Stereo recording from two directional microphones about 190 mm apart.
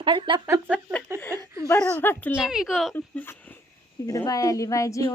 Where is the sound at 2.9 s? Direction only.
10° left (ahead or behind).